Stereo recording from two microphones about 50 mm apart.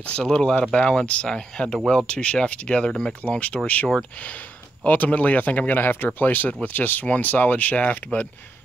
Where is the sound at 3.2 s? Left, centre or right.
Left.